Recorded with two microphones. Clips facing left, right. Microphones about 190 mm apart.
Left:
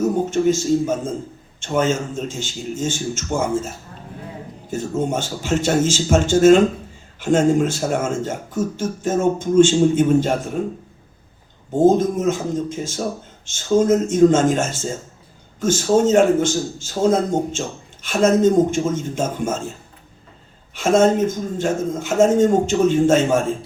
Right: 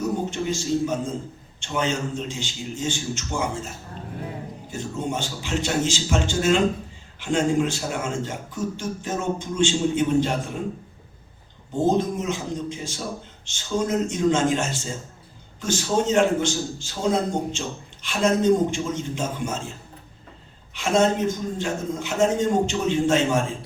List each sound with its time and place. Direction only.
0.0 s speech: 45° left (ahead or behind)
4.7 s speech: 45° left (ahead or behind)
11.9 s speech: 45° left (ahead or behind)
20.7 s speech: 45° left (ahead or behind)